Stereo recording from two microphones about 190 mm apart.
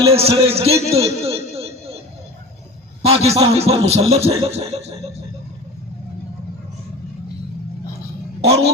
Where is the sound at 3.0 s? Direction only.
30° right (ahead or behind).